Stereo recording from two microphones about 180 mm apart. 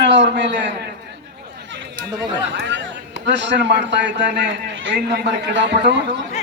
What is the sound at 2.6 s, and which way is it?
A man's voice, 80° right.